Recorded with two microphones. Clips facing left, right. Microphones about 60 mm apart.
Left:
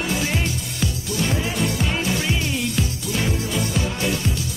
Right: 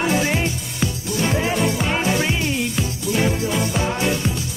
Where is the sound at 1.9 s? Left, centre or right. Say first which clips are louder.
Right 4 dB; right.